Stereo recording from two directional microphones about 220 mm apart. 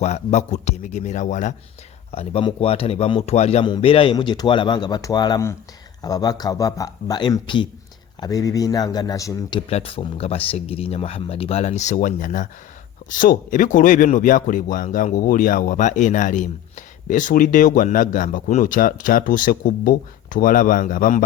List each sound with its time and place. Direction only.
0.0 s speech: 30° left (ahead or behind)